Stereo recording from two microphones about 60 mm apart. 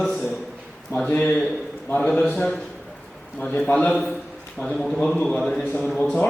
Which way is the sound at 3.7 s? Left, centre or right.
Left.